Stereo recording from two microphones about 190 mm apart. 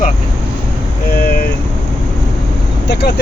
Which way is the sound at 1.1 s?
50° left (ahead or behind).